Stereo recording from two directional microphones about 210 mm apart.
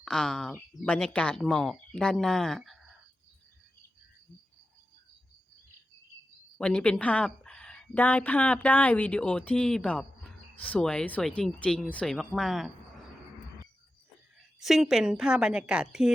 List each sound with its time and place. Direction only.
0.0 s a woman's voice: 5° left (ahead or behind)
6.6 s a woman's voice: 5° left (ahead or behind)
14.6 s a woman's voice: centre (ahead or behind)